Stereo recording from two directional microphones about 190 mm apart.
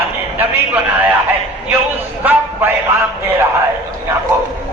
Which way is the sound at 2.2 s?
10° right (ahead or behind).